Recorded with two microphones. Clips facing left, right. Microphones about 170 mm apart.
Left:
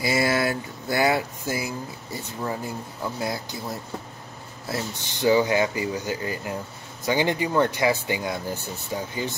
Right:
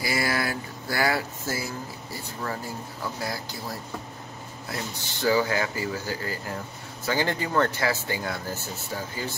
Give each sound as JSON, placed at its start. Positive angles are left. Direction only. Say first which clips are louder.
{"t": 0.0, "sound": "speech", "louder": "left 4 dB", "side_deg": 25}